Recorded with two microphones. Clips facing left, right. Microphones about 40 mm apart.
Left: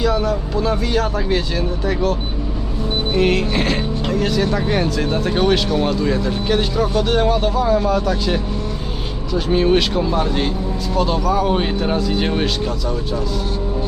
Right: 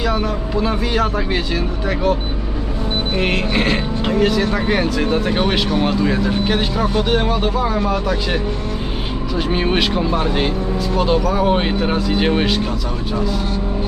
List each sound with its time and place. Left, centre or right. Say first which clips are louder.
0.0 s speech: left 1 dB; centre
3.2 s speech: left 2 dB; centre